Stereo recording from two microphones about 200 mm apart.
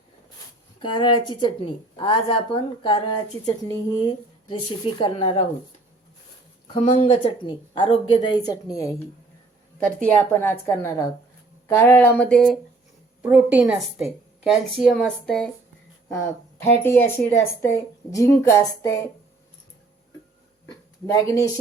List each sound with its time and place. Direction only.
0.8 s a woman's voice: 25° left (ahead or behind)
6.7 s a woman's voice: 30° left (ahead or behind)
9.8 s a woman's voice: 5° left (ahead or behind)
13.2 s a woman's voice: 5° right (ahead or behind)
16.0 s a woman's voice: 15° left (ahead or behind)
20.7 s a sound: 15° left (ahead or behind)